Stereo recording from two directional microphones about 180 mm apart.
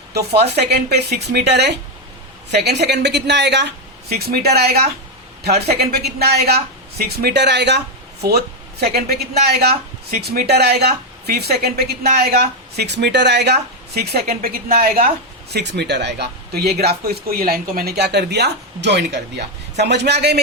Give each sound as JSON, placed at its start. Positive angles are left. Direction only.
{"t": 0.1, "sound": "a woman's voice", "side_deg": -65}
{"t": 4.1, "sound": "speech", "side_deg": -60}
{"t": 5.9, "sound": "a woman's voice", "side_deg": -60}